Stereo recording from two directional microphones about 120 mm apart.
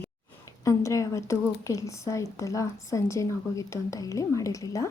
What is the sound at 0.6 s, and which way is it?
A woman's voice, 25° left (ahead or behind).